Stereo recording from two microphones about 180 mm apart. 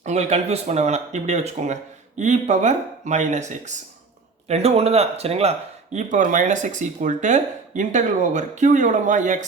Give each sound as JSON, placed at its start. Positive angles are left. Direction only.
{"t": 0.0, "sound": "speech", "side_deg": -35}